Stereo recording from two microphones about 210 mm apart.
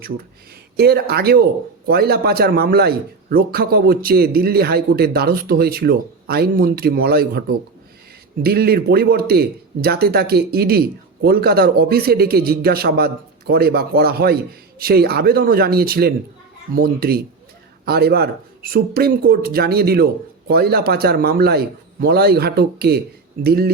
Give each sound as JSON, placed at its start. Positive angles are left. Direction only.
{"t": 0.8, "sound": "a man's voice", "side_deg": -50}